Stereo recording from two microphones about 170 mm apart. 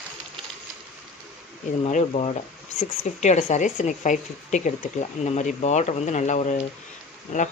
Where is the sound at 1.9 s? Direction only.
40° left (ahead or behind).